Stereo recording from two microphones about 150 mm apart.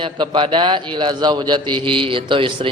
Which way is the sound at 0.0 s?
35° right (ahead or behind).